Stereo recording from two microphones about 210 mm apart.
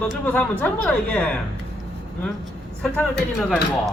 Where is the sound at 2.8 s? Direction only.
5° left (ahead or behind).